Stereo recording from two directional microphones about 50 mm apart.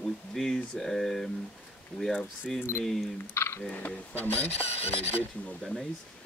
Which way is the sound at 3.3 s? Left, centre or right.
Left.